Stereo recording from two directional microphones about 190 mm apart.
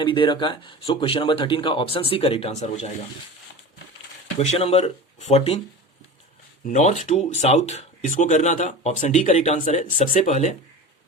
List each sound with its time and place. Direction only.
0.0 s speech: 25° left (ahead or behind)
4.4 s speech: 30° left (ahead or behind)
6.7 s speech: 40° left (ahead or behind)